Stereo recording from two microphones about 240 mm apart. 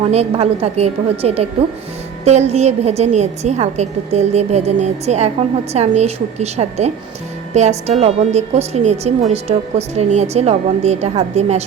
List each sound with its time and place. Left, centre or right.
0.0 s a woman's voice: right